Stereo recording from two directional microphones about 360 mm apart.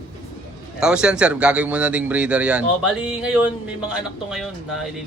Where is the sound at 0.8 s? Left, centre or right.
Centre.